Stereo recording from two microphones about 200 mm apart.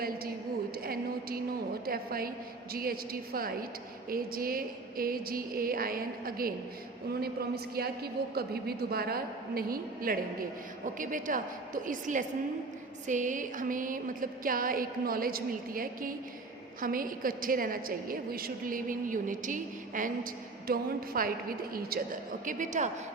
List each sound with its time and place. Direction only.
1.8 s a woman's voice: 50° right (ahead or behind)